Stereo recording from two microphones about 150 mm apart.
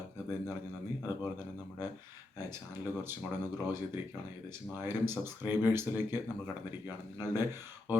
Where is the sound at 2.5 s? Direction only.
15° right (ahead or behind).